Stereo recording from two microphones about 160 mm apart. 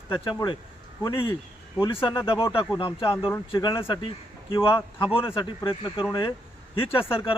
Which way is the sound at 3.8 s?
35° left (ahead or behind).